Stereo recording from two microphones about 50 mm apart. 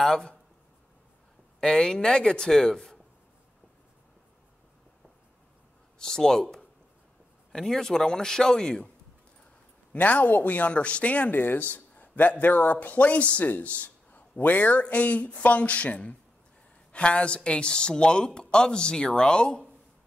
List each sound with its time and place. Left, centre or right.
0.0 s speech: centre
1.6 s speech: centre
5.9 s speech: centre
7.5 s speech: centre
9.9 s speech: left